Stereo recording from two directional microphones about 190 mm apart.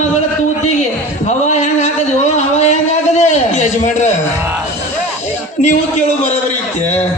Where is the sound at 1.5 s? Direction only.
35° left (ahead or behind).